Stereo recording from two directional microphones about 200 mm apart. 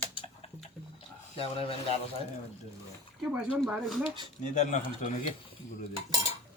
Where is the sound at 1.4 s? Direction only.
30° left (ahead or behind).